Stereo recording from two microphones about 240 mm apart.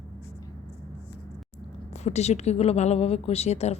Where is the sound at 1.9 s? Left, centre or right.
Left.